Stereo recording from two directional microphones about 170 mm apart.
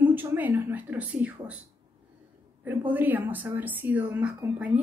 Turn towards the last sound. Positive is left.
turn(degrees=-10)  # may be behind; listen again after turning